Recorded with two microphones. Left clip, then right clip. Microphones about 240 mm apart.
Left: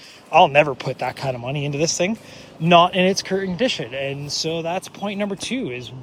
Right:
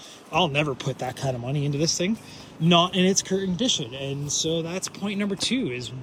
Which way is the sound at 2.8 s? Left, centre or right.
Right.